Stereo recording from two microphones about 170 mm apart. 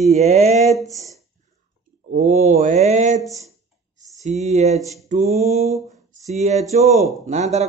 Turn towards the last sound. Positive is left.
turn(degrees=-40)  # may be behind; listen again after turning